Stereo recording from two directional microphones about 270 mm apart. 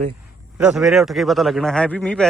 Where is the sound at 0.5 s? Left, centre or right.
Centre.